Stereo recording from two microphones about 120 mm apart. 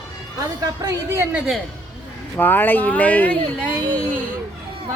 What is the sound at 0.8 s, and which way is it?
Speech, 25° right (ahead or behind).